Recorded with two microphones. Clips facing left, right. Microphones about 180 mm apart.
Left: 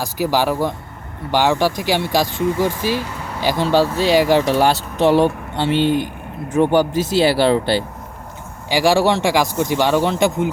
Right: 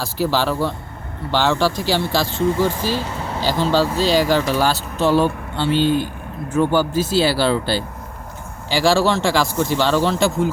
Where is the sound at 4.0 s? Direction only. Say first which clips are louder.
Left 2 dB; 60° left (ahead or behind).